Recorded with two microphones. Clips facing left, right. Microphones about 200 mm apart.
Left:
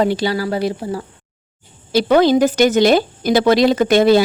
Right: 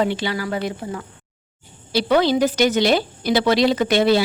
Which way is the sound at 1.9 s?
45° left (ahead or behind).